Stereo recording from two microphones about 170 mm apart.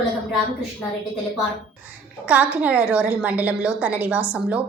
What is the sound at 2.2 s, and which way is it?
A woman's voice, 10° right (ahead or behind).